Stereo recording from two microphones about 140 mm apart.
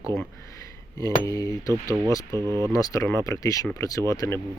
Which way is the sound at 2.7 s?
25° left (ahead or behind).